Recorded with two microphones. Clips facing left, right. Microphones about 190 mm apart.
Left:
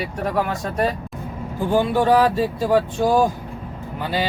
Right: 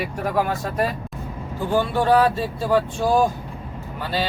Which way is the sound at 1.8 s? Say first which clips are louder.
Left 1 dB; 15° left (ahead or behind).